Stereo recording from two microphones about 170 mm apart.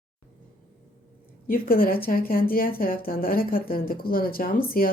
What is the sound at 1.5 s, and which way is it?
Speech, 55° left (ahead or behind).